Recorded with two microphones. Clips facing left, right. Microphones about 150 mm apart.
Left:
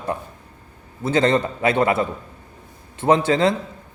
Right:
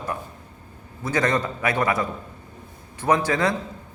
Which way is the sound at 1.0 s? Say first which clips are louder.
Left 5 dB; 25° left (ahead or behind).